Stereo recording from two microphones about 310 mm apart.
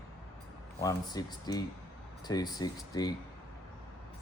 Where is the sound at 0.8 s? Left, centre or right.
Centre.